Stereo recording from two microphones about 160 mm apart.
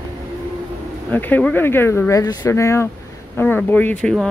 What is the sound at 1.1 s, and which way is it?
Speech, 10° left (ahead or behind).